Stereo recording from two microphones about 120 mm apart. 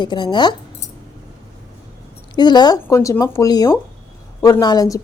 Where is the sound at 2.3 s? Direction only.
40° left (ahead or behind).